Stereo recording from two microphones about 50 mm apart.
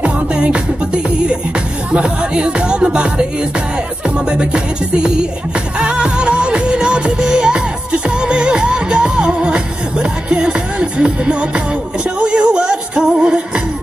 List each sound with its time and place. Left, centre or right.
0.0 s music: right
1.9 s speech: right
4.3 s music: centre